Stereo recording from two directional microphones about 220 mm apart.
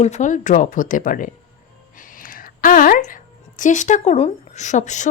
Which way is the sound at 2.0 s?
40° left (ahead or behind).